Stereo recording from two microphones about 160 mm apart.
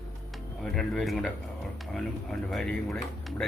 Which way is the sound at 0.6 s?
Centre (ahead or behind).